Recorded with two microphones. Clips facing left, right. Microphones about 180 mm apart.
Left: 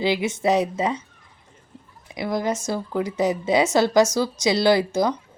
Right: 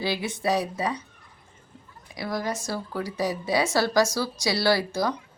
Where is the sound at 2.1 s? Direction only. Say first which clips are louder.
Left 5 dB; 20° left (ahead or behind).